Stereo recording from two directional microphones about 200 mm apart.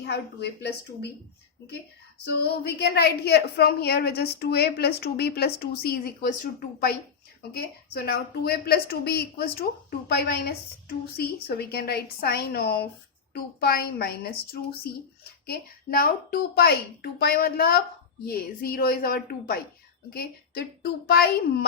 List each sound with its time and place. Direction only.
0.0 s a woman's voice: 55° left (ahead or behind)
2.2 s a woman's voice: 55° left (ahead or behind)